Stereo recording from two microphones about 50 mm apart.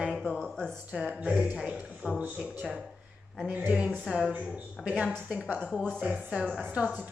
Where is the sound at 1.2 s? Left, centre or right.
Right.